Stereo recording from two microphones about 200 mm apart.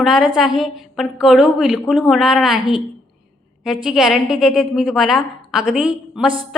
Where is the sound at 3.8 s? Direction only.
Centre (ahead or behind).